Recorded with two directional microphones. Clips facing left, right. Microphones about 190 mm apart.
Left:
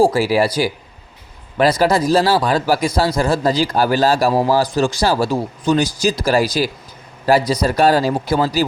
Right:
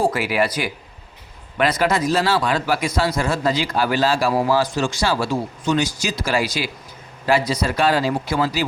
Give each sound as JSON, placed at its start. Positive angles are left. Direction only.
{"t": 0.0, "sound": "a man's voice", "side_deg": 30}